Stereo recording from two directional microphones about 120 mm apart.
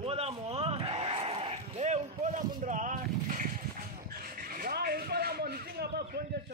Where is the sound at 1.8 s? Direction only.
75° right (ahead or behind); by 3.4 s 90° right.